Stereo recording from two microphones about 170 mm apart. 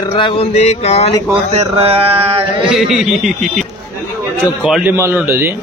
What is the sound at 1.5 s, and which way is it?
Speech, 35° right (ahead or behind).